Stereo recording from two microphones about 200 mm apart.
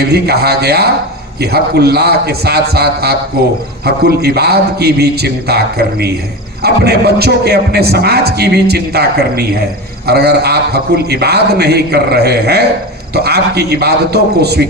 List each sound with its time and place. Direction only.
0.1 s a man's voice: 55° right (ahead or behind)